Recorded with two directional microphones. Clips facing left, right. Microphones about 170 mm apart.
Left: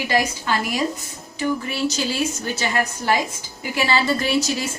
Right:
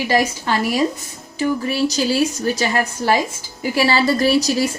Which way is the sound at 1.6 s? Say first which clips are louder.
Right 5 dB; 35° right (ahead or behind).